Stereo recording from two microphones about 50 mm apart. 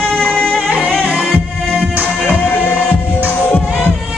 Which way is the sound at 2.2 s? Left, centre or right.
Left.